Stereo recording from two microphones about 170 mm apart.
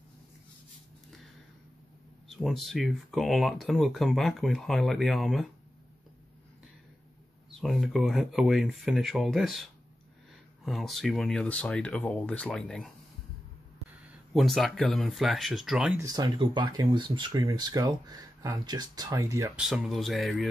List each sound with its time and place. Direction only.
2.2 s speech: centre (ahead or behind)
7.6 s speech: centre (ahead or behind)
14.3 s speech: centre (ahead or behind)
16.0 s speech: 20° right (ahead or behind)
19.7 s speech: centre (ahead or behind)